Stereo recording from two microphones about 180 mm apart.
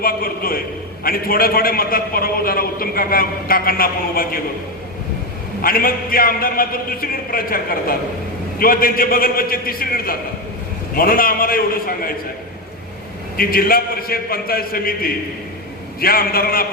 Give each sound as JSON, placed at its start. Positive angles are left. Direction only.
{"t": 0.0, "sound": "a man's voice", "side_deg": 55}
{"t": 5.6, "sound": "a man's voice", "side_deg": 55}
{"t": 13.3, "sound": "a man's voice", "side_deg": 55}